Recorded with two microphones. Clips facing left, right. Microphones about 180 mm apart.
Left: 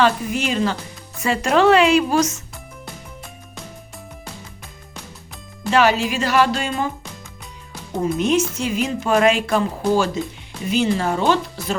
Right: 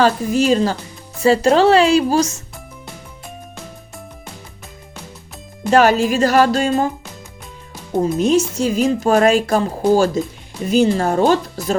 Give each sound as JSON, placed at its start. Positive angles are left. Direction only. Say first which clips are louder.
{"t": 0.0, "sound": "speech", "louder": "right 4 dB", "side_deg": -35}
{"t": 5.7, "sound": "speech", "louder": "right 4 dB", "side_deg": -45}
{"t": 7.9, "sound": "speech", "louder": "right 4 dB", "side_deg": -25}
{"t": 8.2, "sound": "speech", "louder": "right 3 dB", "side_deg": -40}